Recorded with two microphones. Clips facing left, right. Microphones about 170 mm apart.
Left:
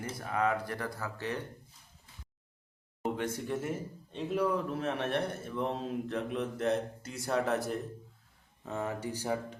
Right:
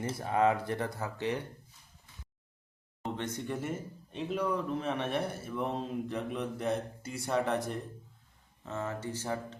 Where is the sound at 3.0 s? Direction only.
10° left (ahead or behind).